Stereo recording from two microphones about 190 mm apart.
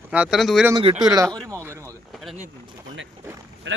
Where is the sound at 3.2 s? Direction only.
15° right (ahead or behind).